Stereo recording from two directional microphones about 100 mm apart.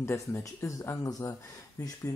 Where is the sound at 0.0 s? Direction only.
25° left (ahead or behind).